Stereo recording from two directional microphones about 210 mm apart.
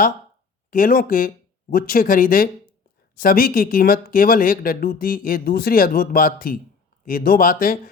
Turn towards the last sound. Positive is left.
turn(degrees=40)  # may be behind; listen again after turning